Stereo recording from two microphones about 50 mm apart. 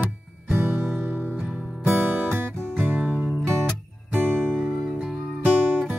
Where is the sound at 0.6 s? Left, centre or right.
Right.